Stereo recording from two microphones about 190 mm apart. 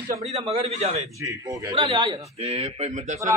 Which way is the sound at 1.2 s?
15° right (ahead or behind).